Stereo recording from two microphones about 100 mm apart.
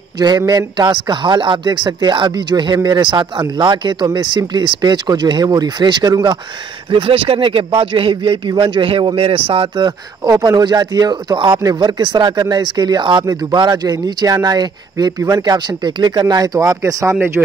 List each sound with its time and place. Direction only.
0.5 s speech: 40° right (ahead or behind)
3.0 s speech: 55° right (ahead or behind)
6.9 s a man's voice: 60° right (ahead or behind)
9.8 s speech: 40° right (ahead or behind)